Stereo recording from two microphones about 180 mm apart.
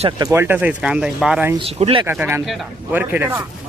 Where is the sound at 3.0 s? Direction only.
10° right (ahead or behind).